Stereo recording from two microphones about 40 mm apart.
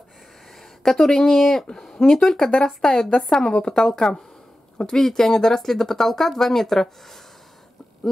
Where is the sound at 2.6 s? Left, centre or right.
Centre.